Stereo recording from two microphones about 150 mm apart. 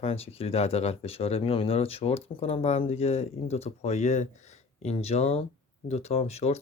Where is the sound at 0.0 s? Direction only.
40° left (ahead or behind).